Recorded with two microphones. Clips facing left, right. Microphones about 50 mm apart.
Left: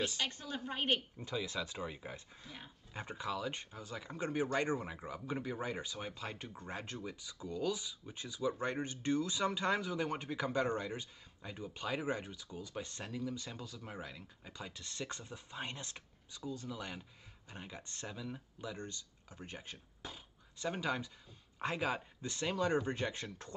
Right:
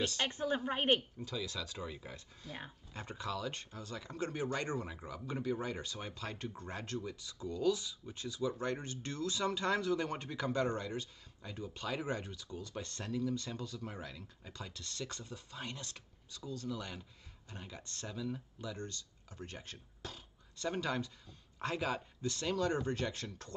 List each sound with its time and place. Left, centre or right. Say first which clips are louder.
0.3 s a woman's voice: right 7 dB; right
1.1 s speech: left 2 dB; left